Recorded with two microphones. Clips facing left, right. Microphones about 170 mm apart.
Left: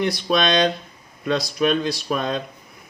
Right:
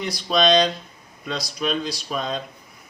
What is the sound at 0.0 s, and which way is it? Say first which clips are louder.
Speech: left 1 dB; 60° left (ahead or behind).